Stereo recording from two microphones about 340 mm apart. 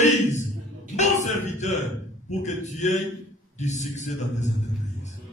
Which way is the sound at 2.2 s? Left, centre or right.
Left.